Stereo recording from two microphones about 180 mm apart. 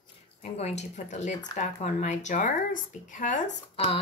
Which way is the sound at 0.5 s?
35° left (ahead or behind).